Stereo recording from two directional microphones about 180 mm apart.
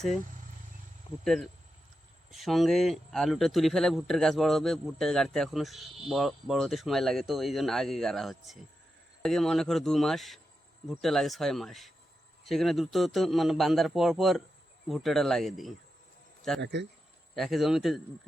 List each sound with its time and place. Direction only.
1.2 s speech: centre (ahead or behind)
16.6 s speech: 75° right (ahead or behind)
17.3 s speech: centre (ahead or behind)